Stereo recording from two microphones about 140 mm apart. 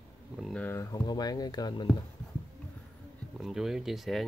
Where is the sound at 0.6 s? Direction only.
20° left (ahead or behind).